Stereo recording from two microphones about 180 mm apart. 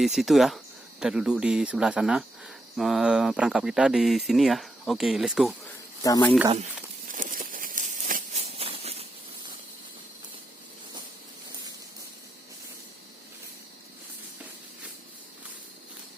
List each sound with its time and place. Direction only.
0.0 s speech: centre (ahead or behind)
6.0 s speech: 20° left (ahead or behind)
7.1 s a sound: 50° right (ahead or behind)